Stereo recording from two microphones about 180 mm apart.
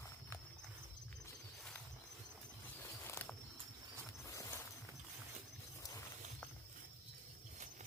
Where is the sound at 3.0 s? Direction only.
10° left (ahead or behind).